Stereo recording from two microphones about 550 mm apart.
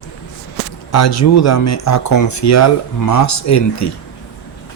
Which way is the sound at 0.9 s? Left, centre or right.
Left.